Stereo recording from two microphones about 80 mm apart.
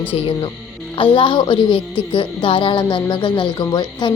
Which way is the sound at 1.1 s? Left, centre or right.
Left.